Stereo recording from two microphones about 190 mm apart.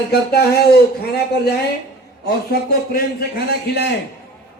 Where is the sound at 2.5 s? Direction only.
55° left (ahead or behind).